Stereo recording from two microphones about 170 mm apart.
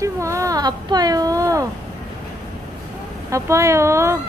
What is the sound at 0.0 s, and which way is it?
Speech, 20° right (ahead or behind).